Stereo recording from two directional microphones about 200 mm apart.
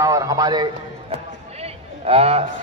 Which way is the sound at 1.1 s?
30° right (ahead or behind).